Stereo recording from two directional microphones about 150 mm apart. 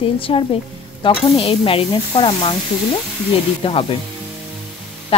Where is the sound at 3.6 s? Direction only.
40° left (ahead or behind).